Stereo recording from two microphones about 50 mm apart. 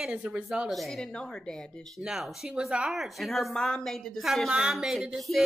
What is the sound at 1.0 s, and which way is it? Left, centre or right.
Speech, centre.